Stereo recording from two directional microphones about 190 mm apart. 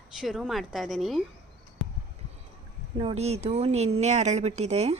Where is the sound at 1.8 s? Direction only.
Centre (ahead or behind).